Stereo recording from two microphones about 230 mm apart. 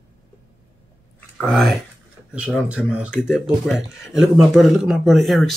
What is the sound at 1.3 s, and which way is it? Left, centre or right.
Speech, centre.